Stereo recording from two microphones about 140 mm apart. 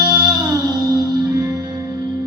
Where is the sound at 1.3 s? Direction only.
25° right (ahead or behind).